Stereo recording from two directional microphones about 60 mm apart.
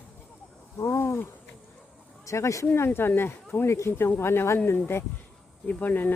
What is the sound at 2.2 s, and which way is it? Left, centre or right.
Speech, left.